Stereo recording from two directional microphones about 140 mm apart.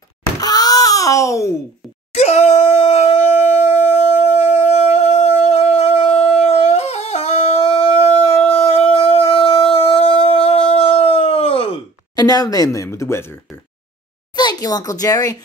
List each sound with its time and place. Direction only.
0.4 s wail: 25° left (ahead or behind)
2.1 s howl: 50° left (ahead or behind)
12.2 s speech: 25° left (ahead or behind)
14.3 s a child's voice: 30° left (ahead or behind)